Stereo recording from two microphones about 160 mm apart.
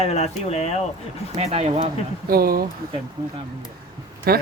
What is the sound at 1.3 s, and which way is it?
Speech, 40° right (ahead or behind).